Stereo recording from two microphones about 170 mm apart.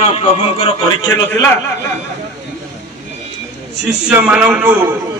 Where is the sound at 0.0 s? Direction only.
35° left (ahead or behind).